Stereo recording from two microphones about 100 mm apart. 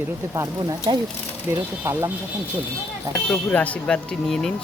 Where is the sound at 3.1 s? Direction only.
10° left (ahead or behind).